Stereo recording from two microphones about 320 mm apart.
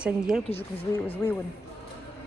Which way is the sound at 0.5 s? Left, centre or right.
Centre.